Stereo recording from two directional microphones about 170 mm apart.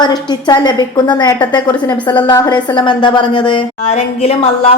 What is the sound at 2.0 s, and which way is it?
A woman's voice, 25° left (ahead or behind).